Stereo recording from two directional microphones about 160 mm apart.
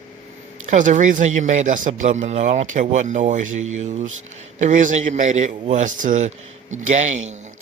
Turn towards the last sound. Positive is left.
turn(degrees=-45)  # may be behind; listen again after turning